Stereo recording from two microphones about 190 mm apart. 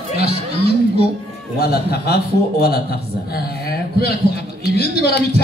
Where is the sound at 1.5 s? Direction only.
55° left (ahead or behind).